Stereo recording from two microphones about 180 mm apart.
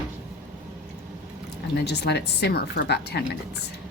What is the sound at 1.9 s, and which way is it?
A woman's voice, 65° left (ahead or behind).